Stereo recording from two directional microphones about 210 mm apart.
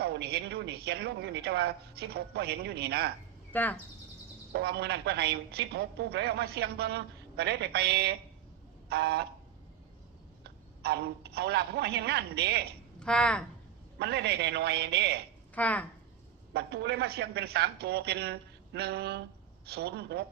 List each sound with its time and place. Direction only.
0.0 s a woman's voice: 50° right (ahead or behind)
3.5 s speech: 10° left (ahead or behind)
4.5 s a woman's voice: 50° right (ahead or behind)
10.4 s speech: 50° right (ahead or behind)
13.0 s a woman's voice: 5° left (ahead or behind)
14.0 s a woman's voice: 50° right (ahead or behind)
15.5 s speech: 5° left (ahead or behind)
16.5 s a woman's voice: 50° right (ahead or behind)